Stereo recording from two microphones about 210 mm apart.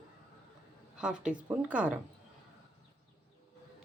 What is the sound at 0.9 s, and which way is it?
Speech, 5° right (ahead or behind).